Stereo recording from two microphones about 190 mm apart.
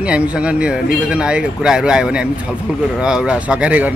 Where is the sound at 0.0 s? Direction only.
5° right (ahead or behind).